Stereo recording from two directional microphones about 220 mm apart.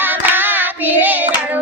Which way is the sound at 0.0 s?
10° right (ahead or behind).